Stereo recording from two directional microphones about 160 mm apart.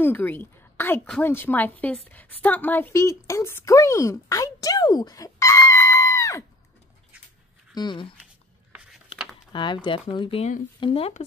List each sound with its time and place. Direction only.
0.0 s a woman's voice: 10° left (ahead or behind)
7.7 s speech: 25° left (ahead or behind)
9.1 s a sound: 35° left (ahead or behind)
9.5 s speech: 30° left (ahead or behind)